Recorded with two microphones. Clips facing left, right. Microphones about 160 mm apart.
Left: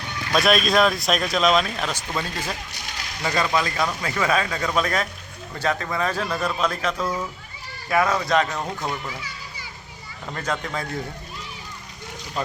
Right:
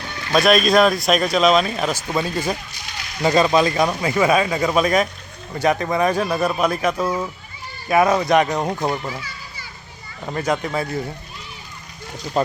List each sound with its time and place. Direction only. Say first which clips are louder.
0.3 s speech: right 4 dB; centre (ahead or behind); by 9.0 s 20° right (ahead or behind)
10.3 s speech: right 6 dB; 10° right (ahead or behind)